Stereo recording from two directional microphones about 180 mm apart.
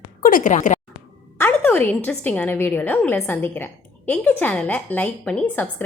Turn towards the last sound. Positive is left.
turn(degrees=5)  # may be behind; listen again after turning